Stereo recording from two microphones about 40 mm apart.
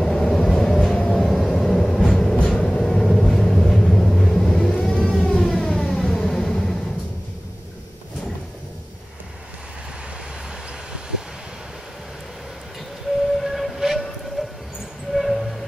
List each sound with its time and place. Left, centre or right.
0.0 s vehicle: centre
0.9 s vehicle: left
1.2 s vehicle: centre
5.6 s music: centre
10.9 s vehicle: centre
13.4 s train: centre
15.1 s train: centre